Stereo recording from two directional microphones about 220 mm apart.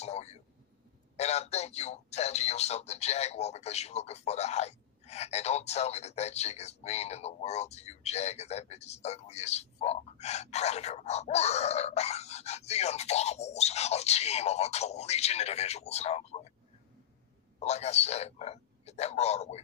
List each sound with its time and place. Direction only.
0.0 s a sound: 30° left (ahead or behind)
1.1 s speech: 30° left (ahead or behind)
17.6 s speech: 30° left (ahead or behind)